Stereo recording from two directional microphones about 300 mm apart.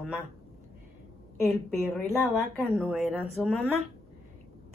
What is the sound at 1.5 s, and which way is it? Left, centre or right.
A woman's voice, centre.